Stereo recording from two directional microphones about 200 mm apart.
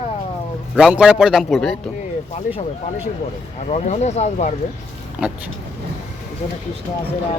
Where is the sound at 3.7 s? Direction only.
35° left (ahead or behind).